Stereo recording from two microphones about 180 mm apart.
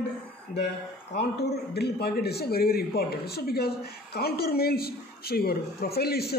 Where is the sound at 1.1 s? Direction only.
65° left (ahead or behind).